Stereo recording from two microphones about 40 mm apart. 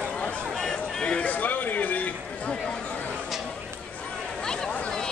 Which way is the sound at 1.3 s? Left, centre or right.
Left.